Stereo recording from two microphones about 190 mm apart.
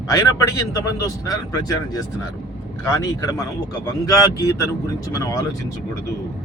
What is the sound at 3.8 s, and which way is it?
Speech, 20° left (ahead or behind).